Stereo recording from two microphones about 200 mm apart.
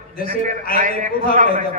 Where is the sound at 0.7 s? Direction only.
40° right (ahead or behind).